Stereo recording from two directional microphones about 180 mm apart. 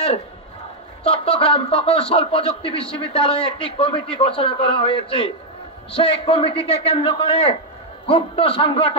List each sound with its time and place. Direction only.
1.0 s speech: 30° left (ahead or behind)